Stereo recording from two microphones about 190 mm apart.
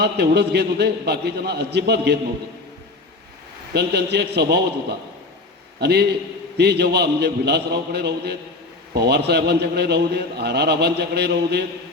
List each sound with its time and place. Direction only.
0.0 s a man's voice: 60° right (ahead or behind)
3.7 s a man's voice: 60° right (ahead or behind)